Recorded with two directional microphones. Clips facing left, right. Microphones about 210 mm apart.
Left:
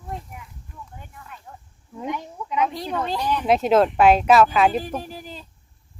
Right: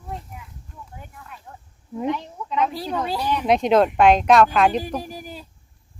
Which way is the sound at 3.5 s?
5° left (ahead or behind).